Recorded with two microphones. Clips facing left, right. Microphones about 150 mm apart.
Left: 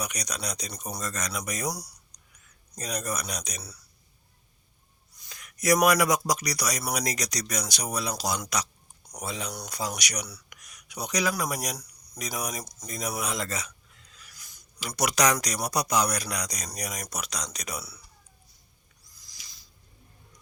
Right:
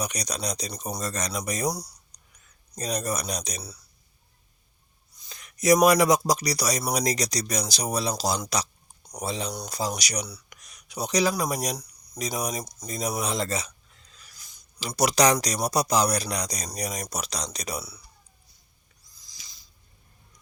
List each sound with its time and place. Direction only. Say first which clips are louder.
0.0 s speech: right 4 dB; 35° right (ahead or behind)
0.7 s speech: right 4 dB; 25° right (ahead or behind)
0.9 s speech: right 3 dB; 35° right (ahead or behind)
2.1 s a sound: even; 30° right (ahead or behind)
2.7 s speech: right 4 dB; 35° right (ahead or behind)
5.2 s speech: right 4 dB; 25° right (ahead or behind)
12.9 s a sound: right 3 dB; 30° right (ahead or behind)
14.8 s speech: right 4 dB; 30° right (ahead or behind)